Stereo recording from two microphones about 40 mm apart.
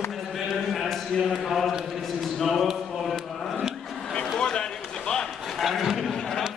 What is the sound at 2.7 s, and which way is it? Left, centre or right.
Mantra, centre.